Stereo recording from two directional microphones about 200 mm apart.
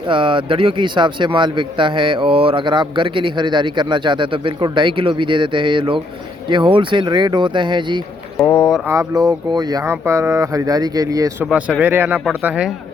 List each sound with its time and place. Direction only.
0.1 s speech: 25° right (ahead or behind)
8.4 s speech: 5° left (ahead or behind)
8.9 s speech: 15° right (ahead or behind)
11.4 s speech: 5° right (ahead or behind)